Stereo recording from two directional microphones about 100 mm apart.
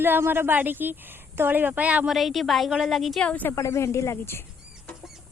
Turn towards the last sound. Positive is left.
turn(degrees=25)  # may be behind; listen again after turning